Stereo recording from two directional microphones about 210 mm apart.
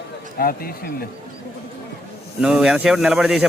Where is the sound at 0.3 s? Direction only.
45° left (ahead or behind).